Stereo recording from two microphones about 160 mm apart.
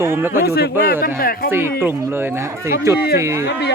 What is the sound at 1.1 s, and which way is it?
Speech, 65° left (ahead or behind).